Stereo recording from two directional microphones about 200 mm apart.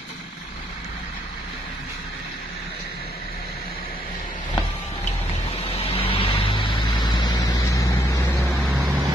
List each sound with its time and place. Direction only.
5.8 s vehicle: 30° left (ahead or behind)
8.5 s vehicle: centre (ahead or behind)
8.8 s vehicle: 20° right (ahead or behind)